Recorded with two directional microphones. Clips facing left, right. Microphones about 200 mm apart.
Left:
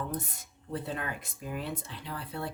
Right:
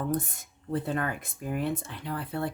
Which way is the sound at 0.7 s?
50° right (ahead or behind).